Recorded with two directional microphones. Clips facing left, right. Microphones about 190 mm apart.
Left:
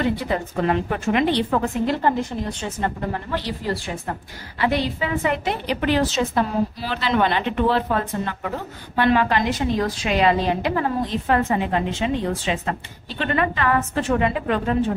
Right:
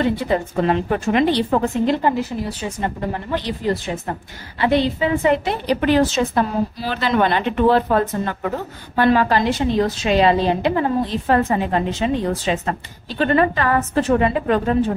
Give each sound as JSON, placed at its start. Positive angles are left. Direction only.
{"t": 0.0, "sound": "a woman's voice", "side_deg": -25}
{"t": 2.8, "sound": "a woman's voice", "side_deg": -20}
{"t": 5.9, "sound": "a woman's voice", "side_deg": -45}
{"t": 9.6, "sound": "a woman's voice", "side_deg": -25}